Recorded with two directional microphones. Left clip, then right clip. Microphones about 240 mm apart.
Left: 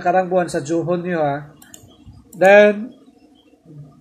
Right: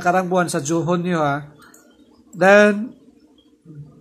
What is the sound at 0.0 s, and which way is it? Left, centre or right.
A man's voice, right.